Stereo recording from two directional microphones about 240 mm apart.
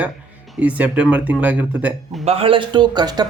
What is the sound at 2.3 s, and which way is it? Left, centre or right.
Speech, right.